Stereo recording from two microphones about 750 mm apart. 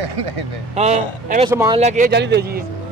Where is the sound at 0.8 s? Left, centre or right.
Centre.